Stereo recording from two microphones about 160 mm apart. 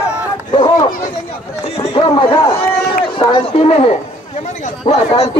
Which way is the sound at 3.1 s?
30° left (ahead or behind).